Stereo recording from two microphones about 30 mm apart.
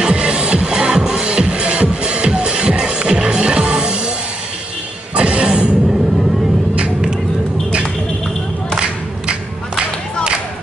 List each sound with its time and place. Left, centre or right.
0.1 s music: right; by 1.2 s centre
1.2 s music: right
5.1 s music: right